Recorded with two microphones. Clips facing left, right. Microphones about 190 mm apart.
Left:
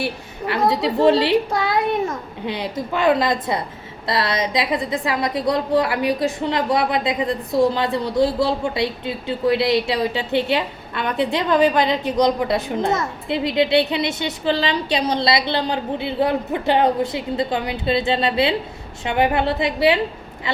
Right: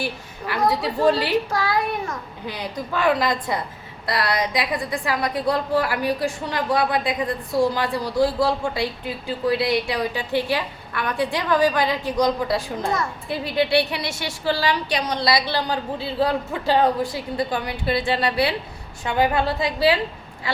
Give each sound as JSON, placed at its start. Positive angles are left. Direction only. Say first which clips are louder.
{"t": 0.0, "sound": "a woman's voice", "louder": "left 3 dB", "side_deg": 25}